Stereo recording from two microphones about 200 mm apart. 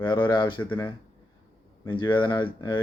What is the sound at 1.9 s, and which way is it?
Speech, 25° left (ahead or behind).